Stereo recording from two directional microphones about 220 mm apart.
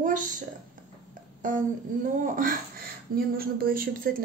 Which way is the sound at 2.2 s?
40° right (ahead or behind).